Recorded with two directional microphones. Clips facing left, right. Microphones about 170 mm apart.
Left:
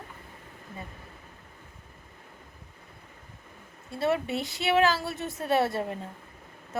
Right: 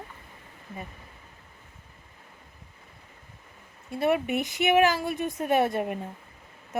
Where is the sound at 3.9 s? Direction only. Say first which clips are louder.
Right 2 dB; 15° right (ahead or behind).